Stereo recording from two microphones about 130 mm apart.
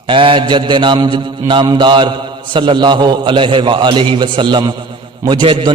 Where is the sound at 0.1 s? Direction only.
40° right (ahead or behind).